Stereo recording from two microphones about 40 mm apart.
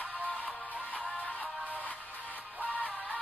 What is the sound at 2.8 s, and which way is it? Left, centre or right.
Music, left.